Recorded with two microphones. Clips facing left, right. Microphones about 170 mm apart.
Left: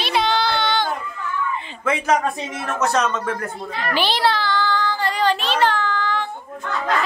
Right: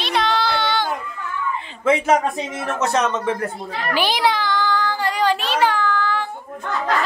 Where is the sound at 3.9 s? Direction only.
10° right (ahead or behind).